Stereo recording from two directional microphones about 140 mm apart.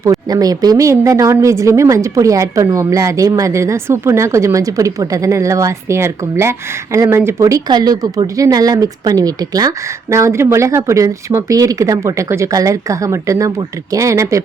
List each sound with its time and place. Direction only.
0.0 s speech: 25° right (ahead or behind)